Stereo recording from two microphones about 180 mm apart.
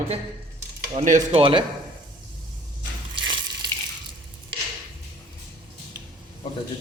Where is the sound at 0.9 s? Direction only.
45° right (ahead or behind).